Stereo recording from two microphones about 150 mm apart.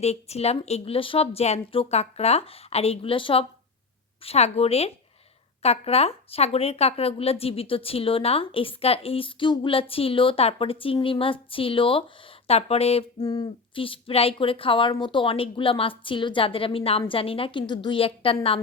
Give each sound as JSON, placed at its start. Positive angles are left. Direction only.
{"t": 0.0, "sound": "speech", "side_deg": 45}
{"t": 13.2, "sound": "speech", "side_deg": 30}